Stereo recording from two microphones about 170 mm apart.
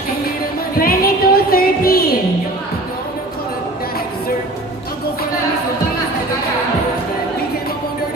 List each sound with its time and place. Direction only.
0.8 s music: 60° left (ahead or behind)